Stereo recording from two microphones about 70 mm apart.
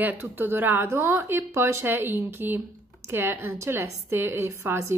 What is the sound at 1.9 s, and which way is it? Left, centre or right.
A woman's voice, right.